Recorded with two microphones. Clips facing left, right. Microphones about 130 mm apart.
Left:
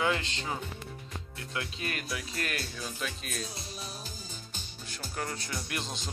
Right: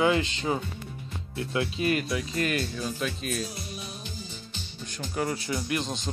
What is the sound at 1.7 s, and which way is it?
Speech, 5° right (ahead or behind).